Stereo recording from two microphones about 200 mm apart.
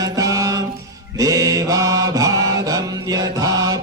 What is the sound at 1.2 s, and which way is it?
Mantra, 15° right (ahead or behind).